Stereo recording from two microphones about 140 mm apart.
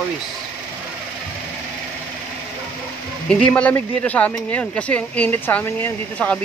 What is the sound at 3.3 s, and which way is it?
Speech, 10° left (ahead or behind).